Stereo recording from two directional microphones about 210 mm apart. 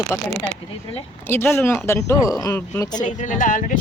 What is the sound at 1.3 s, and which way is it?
Speech, 10° left (ahead or behind).